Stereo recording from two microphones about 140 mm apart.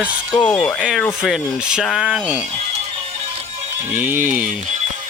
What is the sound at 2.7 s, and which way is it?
Music, 45° right (ahead or behind).